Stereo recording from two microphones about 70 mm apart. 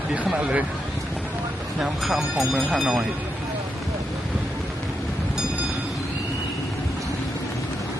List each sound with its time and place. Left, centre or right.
0.3 s speech: centre
1.8 s speech: centre